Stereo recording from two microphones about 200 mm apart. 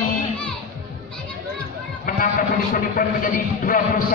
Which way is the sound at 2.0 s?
45° left (ahead or behind).